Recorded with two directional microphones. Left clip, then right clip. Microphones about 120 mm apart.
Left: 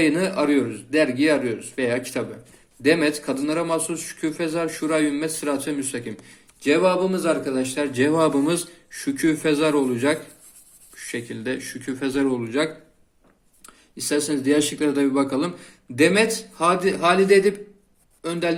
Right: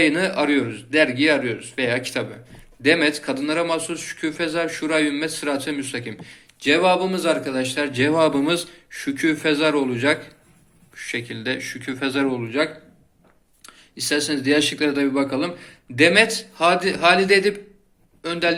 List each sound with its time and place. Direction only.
0.0 s a man's voice: 45° left (ahead or behind)
12.3 s a man's voice: 65° left (ahead or behind)
13.7 s speech: 40° left (ahead or behind)
14.9 s a man's voice: 60° left (ahead or behind)
16.0 s a man's voice: 45° left (ahead or behind)